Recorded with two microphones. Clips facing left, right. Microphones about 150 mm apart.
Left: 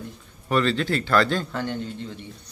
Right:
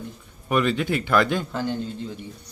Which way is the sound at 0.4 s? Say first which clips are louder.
Even; 15° right (ahead or behind).